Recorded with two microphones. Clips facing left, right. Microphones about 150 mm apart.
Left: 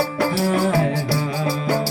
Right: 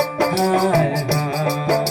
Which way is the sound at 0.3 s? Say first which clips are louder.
Right 3 dB; 35° right (ahead or behind).